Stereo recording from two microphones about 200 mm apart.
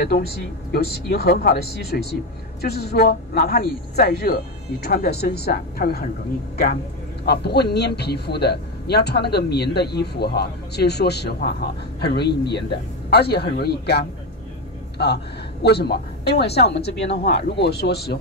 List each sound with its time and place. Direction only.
0.0 s a man's voice: 50° left (ahead or behind)
15.6 s a man's voice: 55° left (ahead or behind)